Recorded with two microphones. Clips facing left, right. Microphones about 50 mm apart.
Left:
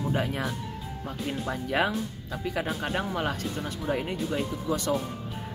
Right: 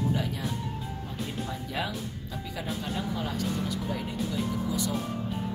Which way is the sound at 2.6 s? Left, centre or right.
Left.